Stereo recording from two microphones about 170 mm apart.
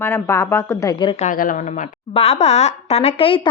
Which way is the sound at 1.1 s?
50° left (ahead or behind).